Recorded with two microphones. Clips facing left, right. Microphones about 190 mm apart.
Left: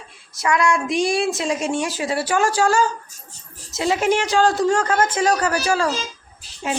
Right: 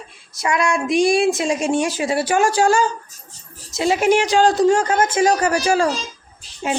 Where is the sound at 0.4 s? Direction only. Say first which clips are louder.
Even; 20° right (ahead or behind).